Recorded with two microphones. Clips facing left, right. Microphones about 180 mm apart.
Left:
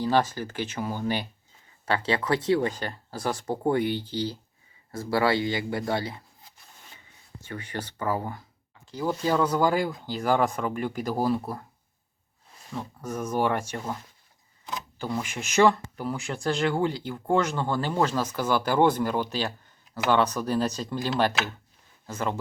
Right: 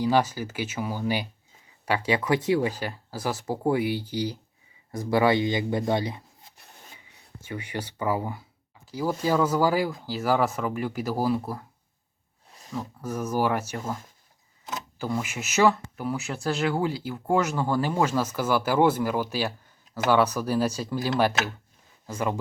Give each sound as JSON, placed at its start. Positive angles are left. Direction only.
{"t": 0.0, "sound": "speech", "side_deg": -10}
{"t": 7.4, "sound": "speech", "side_deg": -10}
{"t": 12.7, "sound": "speech", "side_deg": -5}